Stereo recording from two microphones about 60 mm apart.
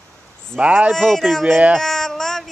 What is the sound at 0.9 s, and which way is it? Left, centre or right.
Speech, centre.